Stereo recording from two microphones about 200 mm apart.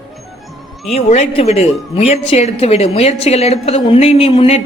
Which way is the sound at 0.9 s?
30° left (ahead or behind).